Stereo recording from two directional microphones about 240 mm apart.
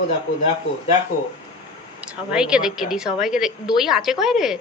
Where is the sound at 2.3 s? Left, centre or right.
Centre.